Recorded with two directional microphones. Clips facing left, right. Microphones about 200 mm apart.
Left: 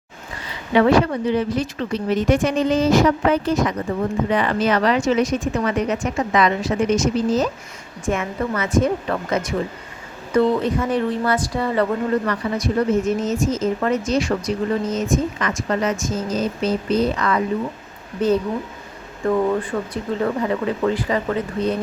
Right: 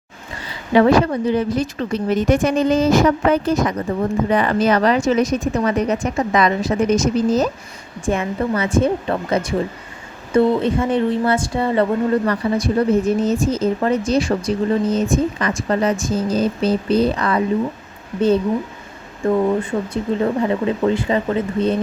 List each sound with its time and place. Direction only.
0.7 s a woman's voice: 40° right (ahead or behind)
19.9 s speech: 25° right (ahead or behind)